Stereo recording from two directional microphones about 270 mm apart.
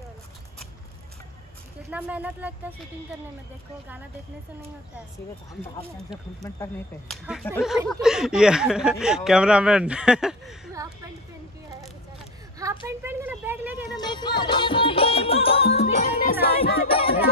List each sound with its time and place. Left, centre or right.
1.9 s speech: centre
7.1 s speech: centre
12.5 s speech: centre
13.9 s music: centre
16.3 s music: left
16.9 s music: left